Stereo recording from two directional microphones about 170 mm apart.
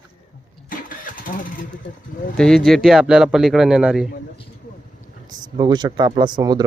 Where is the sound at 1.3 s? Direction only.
50° left (ahead or behind).